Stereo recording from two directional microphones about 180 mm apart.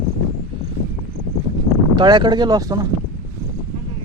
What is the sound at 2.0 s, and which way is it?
Speech, 25° right (ahead or behind).